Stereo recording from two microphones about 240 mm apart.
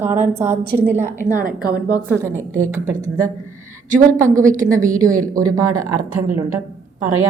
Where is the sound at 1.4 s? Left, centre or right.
Right.